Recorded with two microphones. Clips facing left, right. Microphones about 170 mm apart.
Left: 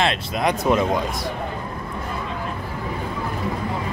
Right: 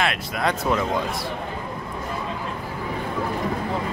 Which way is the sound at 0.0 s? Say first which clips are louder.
Left 3 dB; 25° left (ahead or behind).